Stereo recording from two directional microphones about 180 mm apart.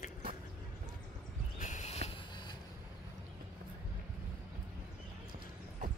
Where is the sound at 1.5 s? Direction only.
40° left (ahead or behind).